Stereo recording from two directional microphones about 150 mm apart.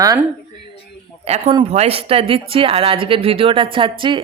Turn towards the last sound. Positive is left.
turn(degrees=-35)  # may be behind; listen again after turning